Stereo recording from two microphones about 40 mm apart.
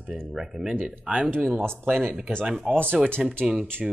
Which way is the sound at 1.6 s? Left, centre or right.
Centre.